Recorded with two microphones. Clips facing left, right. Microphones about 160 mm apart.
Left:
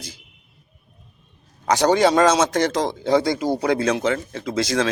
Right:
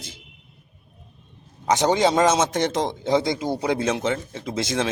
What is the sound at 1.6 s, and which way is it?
A man's voice, 20° right (ahead or behind).